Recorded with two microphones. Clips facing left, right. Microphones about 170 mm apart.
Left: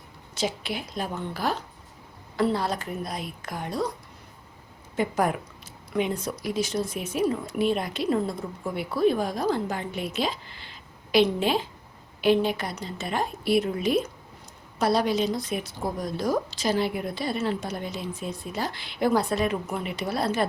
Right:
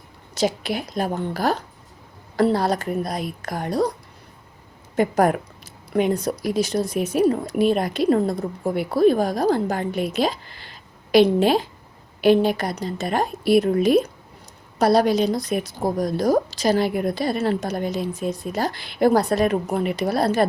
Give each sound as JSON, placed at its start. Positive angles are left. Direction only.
{"t": 0.3, "sound": "a woman's voice", "side_deg": -40}
{"t": 4.9, "sound": "a woman's voice", "side_deg": -45}
{"t": 11.1, "sound": "a woman's voice", "side_deg": -40}
{"t": 14.8, "sound": "a woman's voice", "side_deg": -40}
{"t": 17.3, "sound": "a woman's voice", "side_deg": -60}
{"t": 17.6, "sound": "a woman's voice", "side_deg": -40}